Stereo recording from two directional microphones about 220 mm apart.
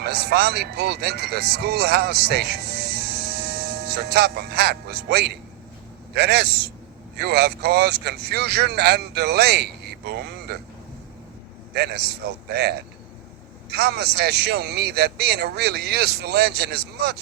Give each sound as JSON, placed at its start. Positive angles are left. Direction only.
{"t": 0.0, "sound": "a man's voice", "side_deg": -45}
{"t": 11.7, "sound": "a man's voice", "side_deg": -45}